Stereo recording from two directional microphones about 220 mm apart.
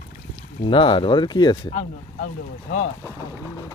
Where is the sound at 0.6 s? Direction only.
20° left (ahead or behind).